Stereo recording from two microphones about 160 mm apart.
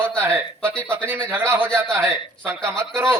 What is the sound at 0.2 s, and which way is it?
Speech, 15° right (ahead or behind).